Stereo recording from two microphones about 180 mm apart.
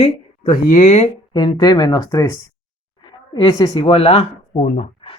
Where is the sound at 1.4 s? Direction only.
25° left (ahead or behind).